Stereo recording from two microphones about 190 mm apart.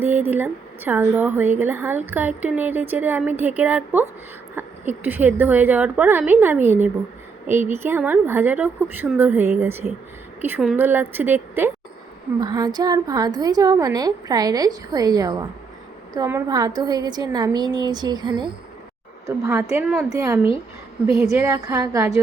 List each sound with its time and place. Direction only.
0.0 s a woman's voice: 10° right (ahead or behind)
12.4 s a woman's voice: 20° right (ahead or behind)